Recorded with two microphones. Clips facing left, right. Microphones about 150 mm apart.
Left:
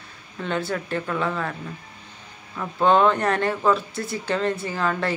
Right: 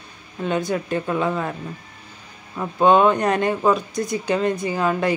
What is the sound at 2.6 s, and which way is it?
Speech, 15° right (ahead or behind).